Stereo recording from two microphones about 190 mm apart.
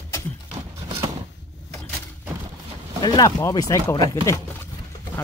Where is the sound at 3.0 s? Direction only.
20° left (ahead or behind).